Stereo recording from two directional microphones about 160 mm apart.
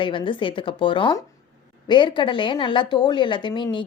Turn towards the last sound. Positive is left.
turn(degrees=30)  # may be behind; listen again after turning